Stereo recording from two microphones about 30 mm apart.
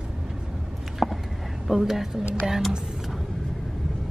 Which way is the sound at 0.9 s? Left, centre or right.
Centre.